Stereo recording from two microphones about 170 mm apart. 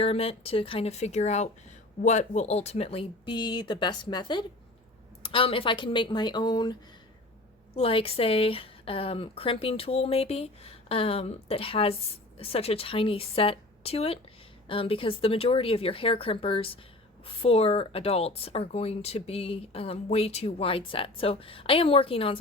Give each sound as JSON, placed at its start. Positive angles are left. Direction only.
{"t": 0.0, "sound": "speech", "side_deg": 35}
{"t": 7.8, "sound": "speech", "side_deg": 35}